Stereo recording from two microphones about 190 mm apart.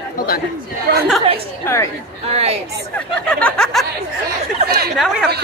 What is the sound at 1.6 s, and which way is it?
Speech, 15° left (ahead or behind).